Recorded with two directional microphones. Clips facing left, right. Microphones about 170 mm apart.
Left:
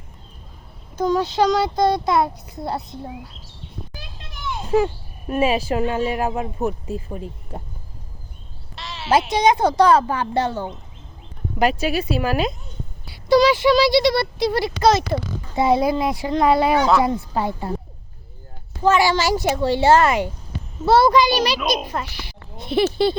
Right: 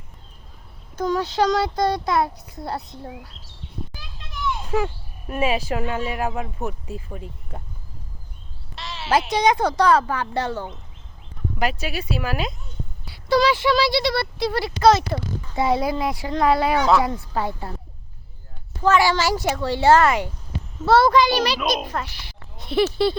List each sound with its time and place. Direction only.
0.9 s a child's voice: 20° left (ahead or behind)
4.6 s speech: 35° left (ahead or behind)
8.7 s a sound: centre (ahead or behind)
9.3 s a child's voice: 20° left (ahead or behind)
11.6 s speech: 35° left (ahead or behind)
13.2 s a child's voice: 15° left (ahead or behind)
18.8 s speech: 20° left (ahead or behind)